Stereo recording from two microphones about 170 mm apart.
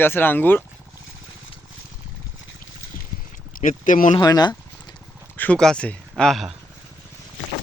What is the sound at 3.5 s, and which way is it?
Speech, 50° left (ahead or behind).